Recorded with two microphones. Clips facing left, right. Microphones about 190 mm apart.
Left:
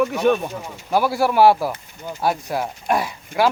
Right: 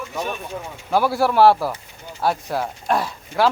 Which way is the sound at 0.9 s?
10° left (ahead or behind).